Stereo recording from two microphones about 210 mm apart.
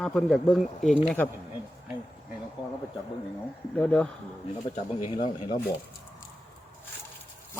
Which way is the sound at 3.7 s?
5° left (ahead or behind).